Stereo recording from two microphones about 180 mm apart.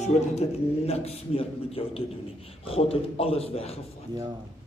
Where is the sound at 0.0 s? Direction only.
35° left (ahead or behind).